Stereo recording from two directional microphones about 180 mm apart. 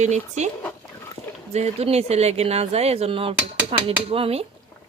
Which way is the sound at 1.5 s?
35° right (ahead or behind).